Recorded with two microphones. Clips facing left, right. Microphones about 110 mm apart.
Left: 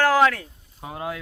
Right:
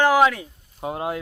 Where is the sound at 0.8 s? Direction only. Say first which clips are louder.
Right 5 dB; 25° right (ahead or behind).